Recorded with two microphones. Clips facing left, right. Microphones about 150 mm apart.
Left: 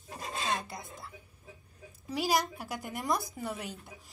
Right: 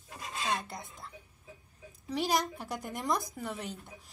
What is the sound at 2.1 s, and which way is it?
Speech, centre (ahead or behind).